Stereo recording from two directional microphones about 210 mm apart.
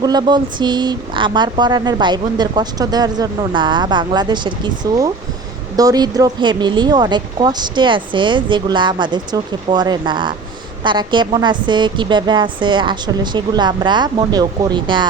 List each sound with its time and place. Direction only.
0.0 s speech: 20° right (ahead or behind)